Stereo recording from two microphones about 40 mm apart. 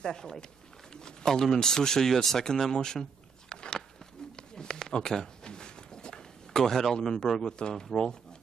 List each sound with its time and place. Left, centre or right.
0.0 s speech: centre
4.4 s a sound: centre
7.2 s speech: centre
7.5 s speech: left